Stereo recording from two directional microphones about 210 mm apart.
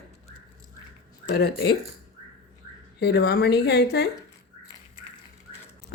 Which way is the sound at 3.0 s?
50° left (ahead or behind).